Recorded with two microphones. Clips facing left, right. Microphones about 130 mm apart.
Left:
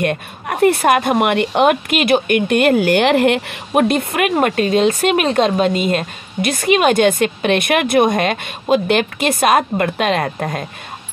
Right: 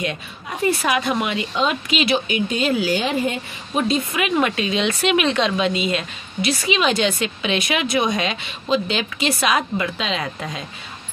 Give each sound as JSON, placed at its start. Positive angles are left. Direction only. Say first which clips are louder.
{"t": 0.0, "sound": "speech", "louder": "left 7 dB", "side_deg": 55}